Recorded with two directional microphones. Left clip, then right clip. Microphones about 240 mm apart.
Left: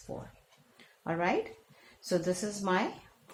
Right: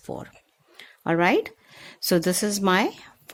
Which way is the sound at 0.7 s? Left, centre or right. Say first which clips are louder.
Right 11 dB; right.